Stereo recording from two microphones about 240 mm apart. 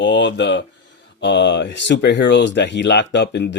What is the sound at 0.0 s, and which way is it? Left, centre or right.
Speech, left.